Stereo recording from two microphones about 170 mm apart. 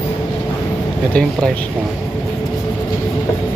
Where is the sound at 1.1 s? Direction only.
5° left (ahead or behind).